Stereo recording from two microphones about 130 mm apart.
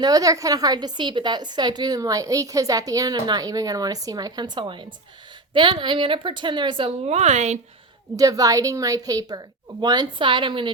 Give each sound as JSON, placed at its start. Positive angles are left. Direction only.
{"t": 0.0, "sound": "a woman's voice", "side_deg": -30}
{"t": 8.1, "sound": "a woman's voice", "side_deg": -25}